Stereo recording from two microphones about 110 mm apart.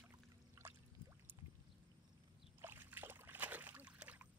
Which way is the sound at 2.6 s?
20° right (ahead or behind).